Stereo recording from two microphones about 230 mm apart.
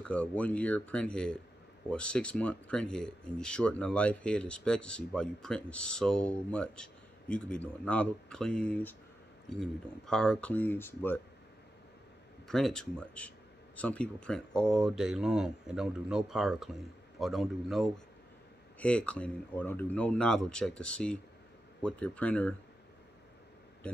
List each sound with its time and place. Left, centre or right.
0.0 s speech: centre
12.4 s speech: centre